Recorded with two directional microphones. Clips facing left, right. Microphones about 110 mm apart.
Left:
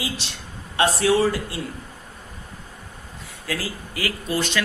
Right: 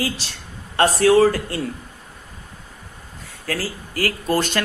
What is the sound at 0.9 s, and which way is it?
Speech, 45° right (ahead or behind).